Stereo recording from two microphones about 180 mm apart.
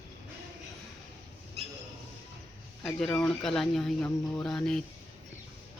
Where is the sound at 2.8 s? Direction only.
5° left (ahead or behind).